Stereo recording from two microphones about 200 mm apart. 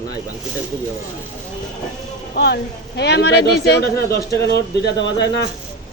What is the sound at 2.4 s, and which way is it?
Speech, 55° left (ahead or behind).